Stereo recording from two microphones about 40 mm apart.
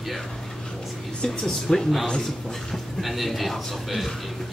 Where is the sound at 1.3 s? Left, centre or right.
Centre.